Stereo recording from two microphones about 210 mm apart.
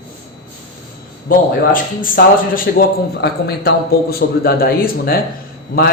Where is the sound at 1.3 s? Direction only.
40° left (ahead or behind).